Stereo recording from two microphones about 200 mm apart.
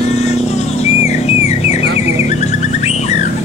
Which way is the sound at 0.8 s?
35° left (ahead or behind).